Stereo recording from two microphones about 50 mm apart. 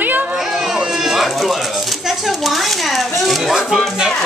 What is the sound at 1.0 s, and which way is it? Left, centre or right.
Speech, centre.